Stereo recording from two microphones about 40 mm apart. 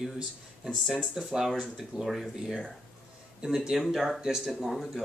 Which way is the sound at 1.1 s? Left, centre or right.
Centre.